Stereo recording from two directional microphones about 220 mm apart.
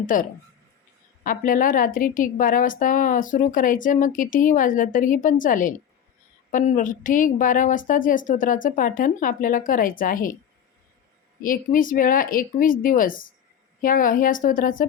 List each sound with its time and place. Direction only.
0.0 s a woman's voice: 40° left (ahead or behind)
11.4 s a woman's voice: 40° left (ahead or behind)